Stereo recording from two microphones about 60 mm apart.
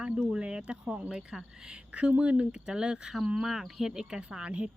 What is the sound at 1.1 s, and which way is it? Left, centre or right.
Speech, centre.